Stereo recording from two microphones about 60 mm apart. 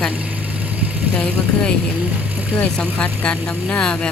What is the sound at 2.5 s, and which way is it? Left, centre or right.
Speech, left.